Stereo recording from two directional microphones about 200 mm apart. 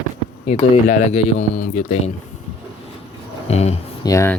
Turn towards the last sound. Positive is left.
turn(degrees=15)  # may be behind; listen again after turning